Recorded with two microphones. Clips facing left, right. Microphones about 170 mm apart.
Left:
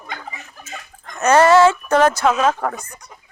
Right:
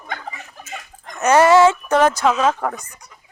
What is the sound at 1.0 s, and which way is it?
Dog, 15° right (ahead or behind).